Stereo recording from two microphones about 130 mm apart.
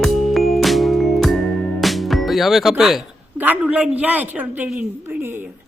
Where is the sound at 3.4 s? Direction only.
10° right (ahead or behind).